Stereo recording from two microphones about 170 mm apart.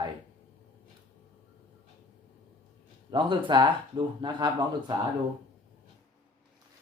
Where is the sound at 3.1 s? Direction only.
30° right (ahead or behind).